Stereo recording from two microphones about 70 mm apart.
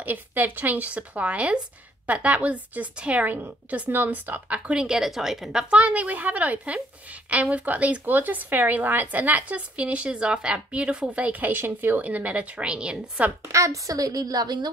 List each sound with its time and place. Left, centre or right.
0.0 s speech: right
13.5 s a woman's voice: right